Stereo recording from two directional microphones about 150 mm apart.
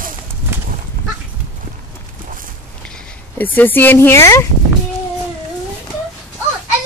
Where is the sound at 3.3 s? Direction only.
10° left (ahead or behind).